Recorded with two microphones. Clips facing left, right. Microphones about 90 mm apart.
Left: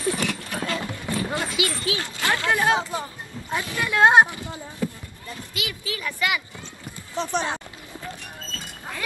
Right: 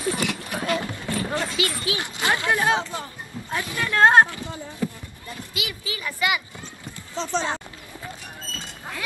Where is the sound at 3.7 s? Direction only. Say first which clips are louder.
Even; 15° left (ahead or behind).